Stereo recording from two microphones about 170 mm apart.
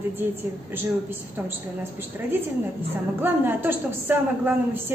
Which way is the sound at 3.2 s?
10° right (ahead or behind).